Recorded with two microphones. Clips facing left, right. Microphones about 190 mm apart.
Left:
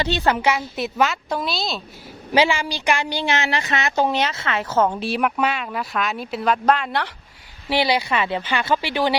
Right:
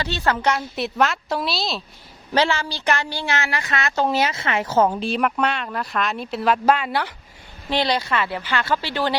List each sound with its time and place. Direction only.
0.0 s speech: 20° left (ahead or behind); by 1.8 s centre (ahead or behind)
2.3 s speech: 10° left (ahead or behind)
4.1 s a woman's voice: 10° right (ahead or behind)
4.9 s speech: 5° left (ahead or behind)
7.7 s speech: 10° left (ahead or behind)